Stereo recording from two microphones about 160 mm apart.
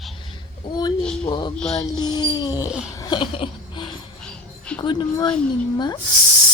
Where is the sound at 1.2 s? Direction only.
30° left (ahead or behind).